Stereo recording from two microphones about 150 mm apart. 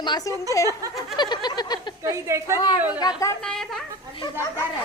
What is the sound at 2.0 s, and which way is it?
A woman's voice, 20° right (ahead or behind).